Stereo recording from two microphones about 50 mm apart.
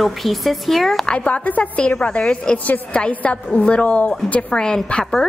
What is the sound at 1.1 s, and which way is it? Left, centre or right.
A woman's voice, left.